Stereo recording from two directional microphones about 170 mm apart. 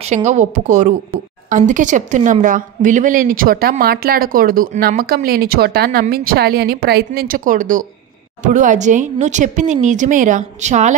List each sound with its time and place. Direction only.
0.0 s a woman's voice: 40° right (ahead or behind); by 7.1 s 70° right (ahead or behind)
7.2 s speech: 55° right (ahead or behind)